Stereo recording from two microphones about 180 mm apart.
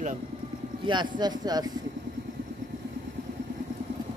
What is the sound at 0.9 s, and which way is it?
Speech, 25° right (ahead or behind).